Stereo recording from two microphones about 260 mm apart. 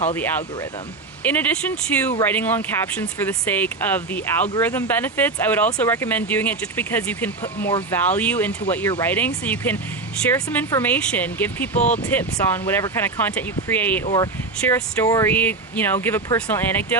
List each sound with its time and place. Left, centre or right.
0.1 s speech: centre
11.7 s speech: left
12.1 s speech: centre